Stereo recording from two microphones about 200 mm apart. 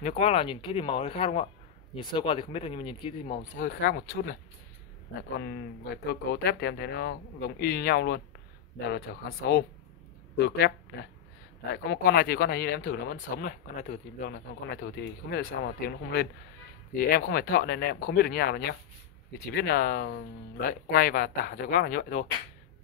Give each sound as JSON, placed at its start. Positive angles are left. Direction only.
{"t": 0.0, "sound": "speech", "side_deg": 30}
{"t": 3.5, "sound": "speech", "side_deg": 45}
{"t": 6.3, "sound": "speech", "side_deg": 55}
{"t": 11.7, "sound": "speech", "side_deg": 50}
{"t": 14.7, "sound": "speech", "side_deg": 50}